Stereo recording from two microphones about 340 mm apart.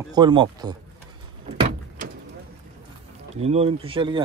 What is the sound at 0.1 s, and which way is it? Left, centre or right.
Speech, centre.